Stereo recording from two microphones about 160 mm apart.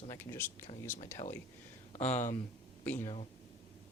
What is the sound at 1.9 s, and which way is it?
Speech, 45° left (ahead or behind).